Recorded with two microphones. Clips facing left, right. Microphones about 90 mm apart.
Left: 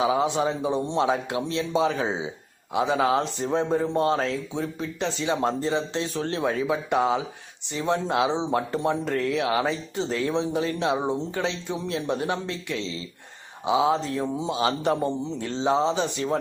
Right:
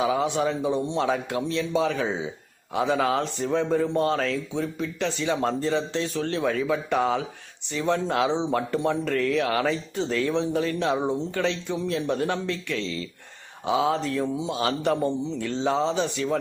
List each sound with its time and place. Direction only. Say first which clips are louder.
0.0 s speech: left 1 dB; 25° left (ahead or behind)